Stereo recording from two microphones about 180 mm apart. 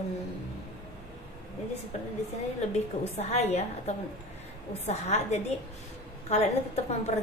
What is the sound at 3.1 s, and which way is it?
Speech, 35° left (ahead or behind).